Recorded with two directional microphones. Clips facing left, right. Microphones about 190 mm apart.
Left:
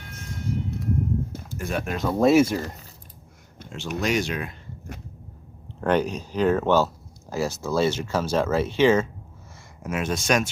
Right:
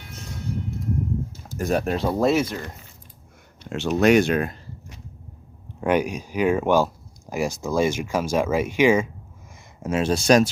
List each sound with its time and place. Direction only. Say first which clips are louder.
1.5 s speech: right 8 dB; 40° right (ahead or behind)
2.2 s speech: left 5 dB; 5° left (ahead or behind)
3.7 s speech: right 8 dB; 65° right (ahead or behind); by 4.5 s 50° right (ahead or behind)
5.8 s speech: right 1 dB; 10° right (ahead or behind)
9.8 s speech: right 5 dB; 30° right (ahead or behind)